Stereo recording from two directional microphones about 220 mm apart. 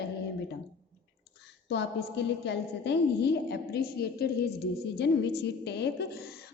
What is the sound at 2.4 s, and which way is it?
A woman's voice, 50° left (ahead or behind).